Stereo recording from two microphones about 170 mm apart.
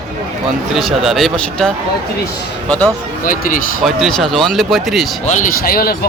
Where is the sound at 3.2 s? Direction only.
55° left (ahead or behind).